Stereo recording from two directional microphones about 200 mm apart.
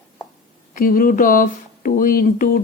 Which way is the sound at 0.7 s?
45° left (ahead or behind).